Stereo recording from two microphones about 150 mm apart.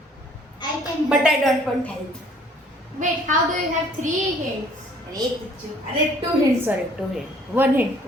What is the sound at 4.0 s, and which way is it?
Speech, 55° right (ahead or behind).